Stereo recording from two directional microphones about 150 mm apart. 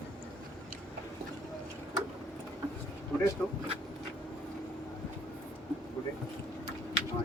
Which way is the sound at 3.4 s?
10° left (ahead or behind).